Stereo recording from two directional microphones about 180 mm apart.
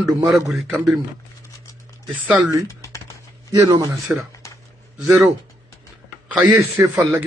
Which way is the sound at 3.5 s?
20° right (ahead or behind).